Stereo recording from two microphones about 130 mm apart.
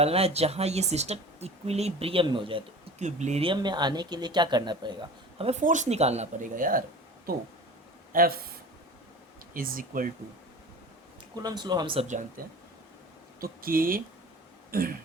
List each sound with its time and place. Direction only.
0.0 s speech: 50° right (ahead or behind)
3.0 s speech: 65° right (ahead or behind)
3.4 s speech: 35° right (ahead or behind)
5.5 s speech: 65° right (ahead or behind)
6.4 s speech: 90° right
8.1 s speech: 90° right
9.6 s speech: 90° right
11.3 s speech: 30° right (ahead or behind)
12.0 s speech: 70° right (ahead or behind)
13.6 s speech: 90° right